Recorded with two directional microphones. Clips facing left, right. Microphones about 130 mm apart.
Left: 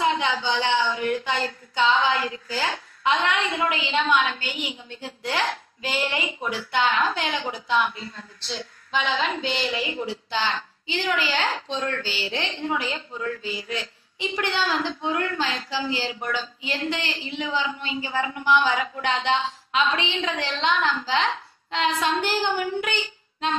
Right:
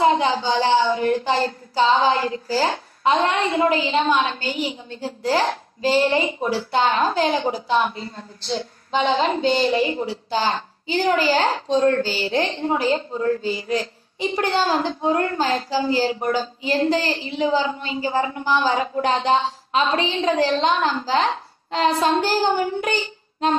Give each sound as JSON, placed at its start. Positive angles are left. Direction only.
{"t": 0.0, "sound": "speech", "side_deg": -35}